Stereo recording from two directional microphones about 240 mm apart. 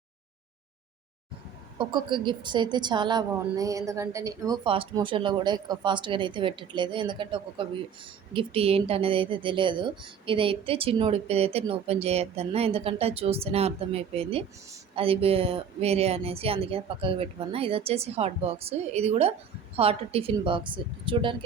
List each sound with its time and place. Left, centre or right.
1.8 s speech: centre